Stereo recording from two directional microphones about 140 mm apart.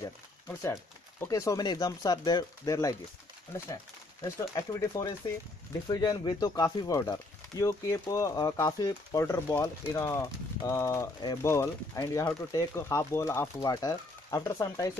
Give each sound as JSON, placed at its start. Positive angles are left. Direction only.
{"t": 0.0, "sound": "a sound", "side_deg": 20}
{"t": 1.2, "sound": "speech", "side_deg": 25}
{"t": 4.2, "sound": "speech", "side_deg": 20}